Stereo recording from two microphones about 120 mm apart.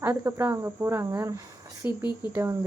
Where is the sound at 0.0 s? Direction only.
20° right (ahead or behind).